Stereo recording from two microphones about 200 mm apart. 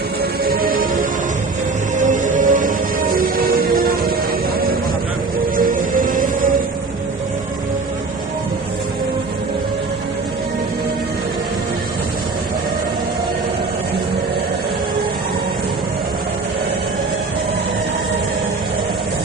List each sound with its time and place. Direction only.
0.4 s music: 45° right (ahead or behind)
2.0 s music: 40° right (ahead or behind)
5.5 s music: 45° right (ahead or behind)